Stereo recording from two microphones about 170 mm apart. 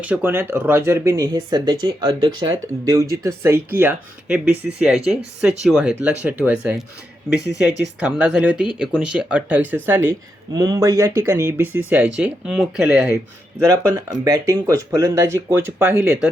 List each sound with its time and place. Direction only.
0.0 s speech: 10° right (ahead or behind)
14.3 s speech: 20° right (ahead or behind)